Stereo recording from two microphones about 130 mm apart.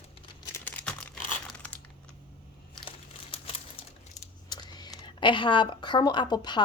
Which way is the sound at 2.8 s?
45° left (ahead or behind).